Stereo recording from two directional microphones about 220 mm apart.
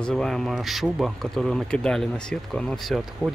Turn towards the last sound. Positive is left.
turn(degrees=0)  # may be behind; listen again after turning